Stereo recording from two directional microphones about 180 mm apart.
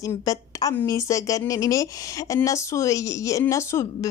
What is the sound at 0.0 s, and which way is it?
A woman's voice, 20° left (ahead or behind).